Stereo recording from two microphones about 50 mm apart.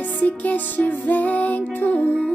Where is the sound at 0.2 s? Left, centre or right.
Left.